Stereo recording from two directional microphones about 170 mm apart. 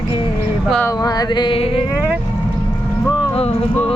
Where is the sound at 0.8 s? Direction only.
25° left (ahead or behind).